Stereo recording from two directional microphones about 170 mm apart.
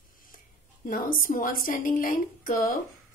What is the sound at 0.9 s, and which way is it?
A woman's voice, 55° left (ahead or behind).